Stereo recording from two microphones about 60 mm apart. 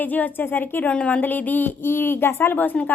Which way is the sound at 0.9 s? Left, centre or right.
Left.